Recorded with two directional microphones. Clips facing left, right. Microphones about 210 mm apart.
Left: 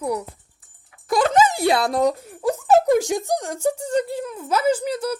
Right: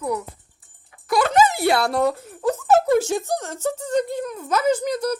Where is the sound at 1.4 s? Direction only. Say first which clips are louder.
Even; 15° left (ahead or behind).